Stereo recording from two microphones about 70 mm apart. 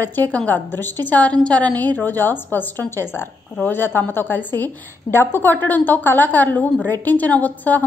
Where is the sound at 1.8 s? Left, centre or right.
Left.